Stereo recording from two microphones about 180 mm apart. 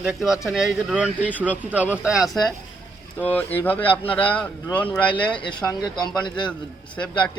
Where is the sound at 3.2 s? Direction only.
10° left (ahead or behind).